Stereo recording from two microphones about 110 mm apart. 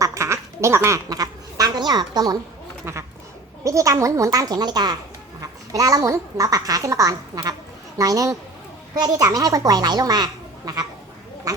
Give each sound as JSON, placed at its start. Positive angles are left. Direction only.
{"t": 0.0, "sound": "speech", "side_deg": -25}
{"t": 3.6, "sound": "speech", "side_deg": -30}